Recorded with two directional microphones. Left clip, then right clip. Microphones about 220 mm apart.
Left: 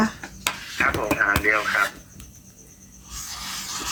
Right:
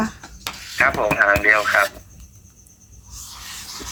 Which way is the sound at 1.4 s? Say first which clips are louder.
Right 5 dB; 50° right (ahead or behind).